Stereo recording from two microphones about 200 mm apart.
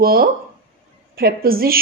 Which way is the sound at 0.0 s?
50° right (ahead or behind).